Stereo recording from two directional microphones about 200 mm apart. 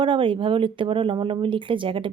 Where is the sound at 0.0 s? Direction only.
25° right (ahead or behind).